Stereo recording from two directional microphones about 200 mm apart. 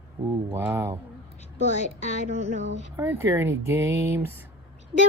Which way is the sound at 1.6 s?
35° left (ahead or behind).